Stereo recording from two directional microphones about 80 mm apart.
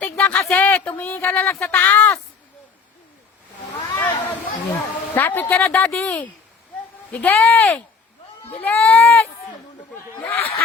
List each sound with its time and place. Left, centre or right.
0.0 s a sound: centre
0.5 s speech: centre
4.0 s chatter: left
5.1 s speech: left
10.2 s speech: left